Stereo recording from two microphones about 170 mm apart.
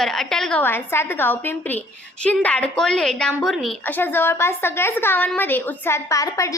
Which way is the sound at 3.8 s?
10° left (ahead or behind).